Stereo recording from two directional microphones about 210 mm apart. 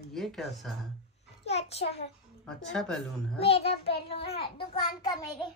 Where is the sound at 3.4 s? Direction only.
30° left (ahead or behind).